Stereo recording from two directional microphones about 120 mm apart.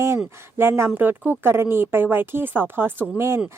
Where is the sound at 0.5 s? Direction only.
20° right (ahead or behind).